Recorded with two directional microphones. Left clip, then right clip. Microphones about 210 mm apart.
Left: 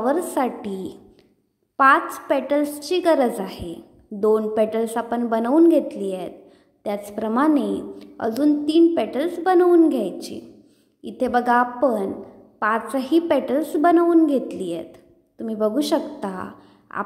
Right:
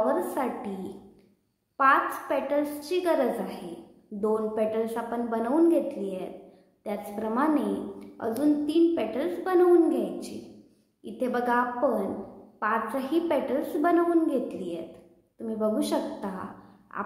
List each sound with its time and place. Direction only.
0.0 s a woman's voice: 40° left (ahead or behind)
1.8 s a woman's voice: 40° left (ahead or behind)